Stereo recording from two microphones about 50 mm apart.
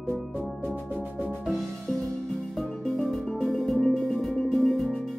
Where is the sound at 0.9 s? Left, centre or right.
Left.